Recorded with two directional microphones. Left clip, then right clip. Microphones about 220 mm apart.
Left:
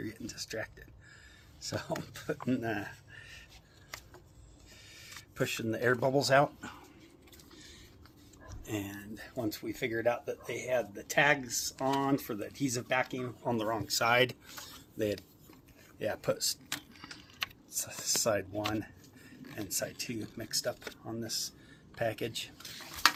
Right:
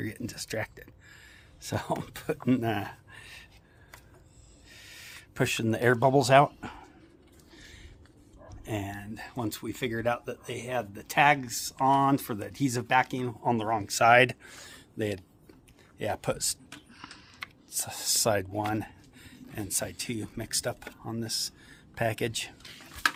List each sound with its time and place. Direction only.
0.0 s speech: 55° right (ahead or behind)
2.5 s a sound: 55° right (ahead or behind)
4.8 s speech: 60° right (ahead or behind); by 6.8 s 40° right (ahead or behind)
7.5 s a sound: 50° right (ahead or behind)
8.4 s speech: 50° right (ahead or behind)
17.7 s speech: 55° right (ahead or behind)